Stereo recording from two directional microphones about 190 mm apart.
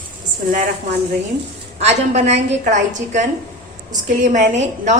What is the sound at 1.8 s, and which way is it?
A woman's voice, 35° right (ahead or behind).